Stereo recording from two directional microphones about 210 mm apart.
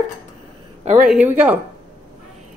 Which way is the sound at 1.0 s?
5° right (ahead or behind).